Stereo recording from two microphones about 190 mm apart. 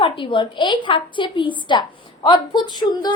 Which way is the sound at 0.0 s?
25° left (ahead or behind).